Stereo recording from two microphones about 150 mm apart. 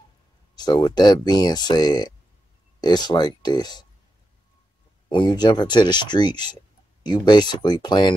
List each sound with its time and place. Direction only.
0.6 s speech: 30° left (ahead or behind)
5.1 s speech: 30° left (ahead or behind)